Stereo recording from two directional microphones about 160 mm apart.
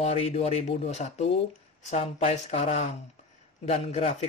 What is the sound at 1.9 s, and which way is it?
Speech, 40° left (ahead or behind).